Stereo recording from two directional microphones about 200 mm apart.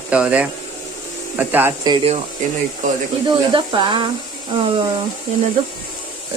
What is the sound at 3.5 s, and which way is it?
Speech, 25° right (ahead or behind).